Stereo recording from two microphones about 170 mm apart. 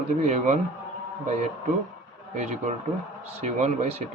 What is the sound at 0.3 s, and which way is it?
Speech, 45° right (ahead or behind).